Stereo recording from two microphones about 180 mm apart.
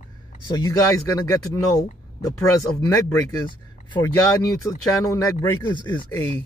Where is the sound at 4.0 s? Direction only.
20° left (ahead or behind).